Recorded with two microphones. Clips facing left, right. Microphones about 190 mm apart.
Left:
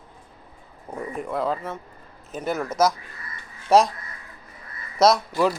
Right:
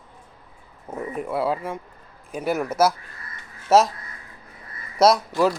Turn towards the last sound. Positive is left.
turn(degrees=-5)  # may be behind; listen again after turning